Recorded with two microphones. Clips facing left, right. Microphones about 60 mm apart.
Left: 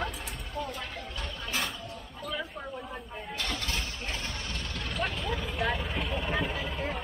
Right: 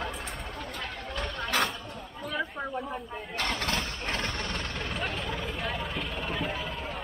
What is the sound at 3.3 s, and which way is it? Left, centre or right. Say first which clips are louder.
Vehicle: right 4 dB; right.